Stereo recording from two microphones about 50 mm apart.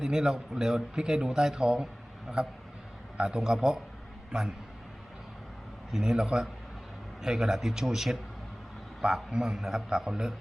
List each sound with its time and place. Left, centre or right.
0.0 s a man's voice: centre
2.3 s a man's voice: centre
5.9 s a man's voice: centre